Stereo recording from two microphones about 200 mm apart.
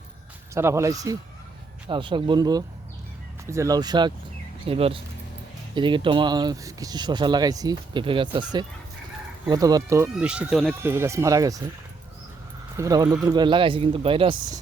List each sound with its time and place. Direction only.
0.5 s speech: 15° right (ahead or behind)
10.8 s speech: 15° right (ahead or behind)
12.7 s speech: 15° right (ahead or behind)